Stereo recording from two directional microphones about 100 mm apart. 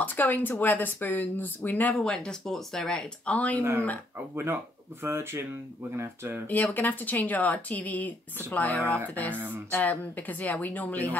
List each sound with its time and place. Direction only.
0.0 s speech: 15° left (ahead or behind)
2.0 s speech: 5° left (ahead or behind)
5.0 s speech: 25° right (ahead or behind)
6.4 s speech: 20° left (ahead or behind)
9.3 s speech: 20° right (ahead or behind)
9.7 s speech: 15° left (ahead or behind)